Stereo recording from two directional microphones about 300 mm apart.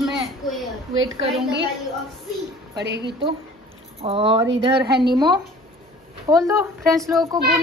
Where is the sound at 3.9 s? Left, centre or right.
Centre.